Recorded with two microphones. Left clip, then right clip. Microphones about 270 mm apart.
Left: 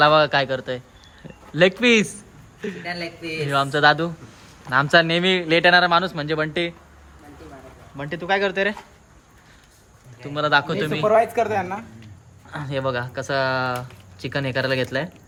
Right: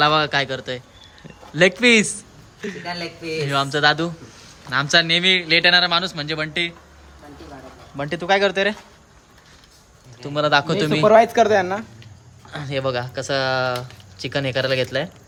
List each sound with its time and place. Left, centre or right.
0.0 s a man's voice: centre
2.8 s a man's voice: centre
3.4 s speech: centre
7.9 s a man's voice: centre
10.2 s a man's voice: centre
11.0 s a man's voice: right
12.5 s speech: centre